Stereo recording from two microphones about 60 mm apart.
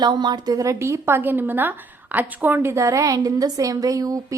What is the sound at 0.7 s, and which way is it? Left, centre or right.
Speech, right.